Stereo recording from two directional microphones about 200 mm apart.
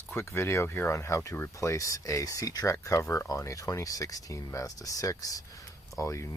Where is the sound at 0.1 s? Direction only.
10° left (ahead or behind).